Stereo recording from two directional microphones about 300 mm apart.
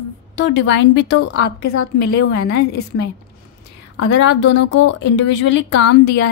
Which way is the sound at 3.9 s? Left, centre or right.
Left.